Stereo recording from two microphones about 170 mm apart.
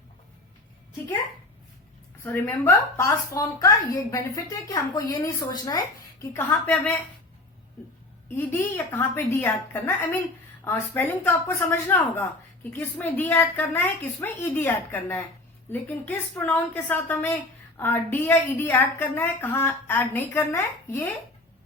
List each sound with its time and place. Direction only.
2.2 s a woman's voice: 15° left (ahead or behind)
4.7 s a woman's voice: 20° left (ahead or behind)
8.4 s a woman's voice: 15° left (ahead or behind)